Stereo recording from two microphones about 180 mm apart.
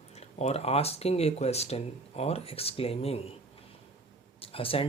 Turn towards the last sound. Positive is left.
turn(degrees=30)  # may be behind; listen again after turning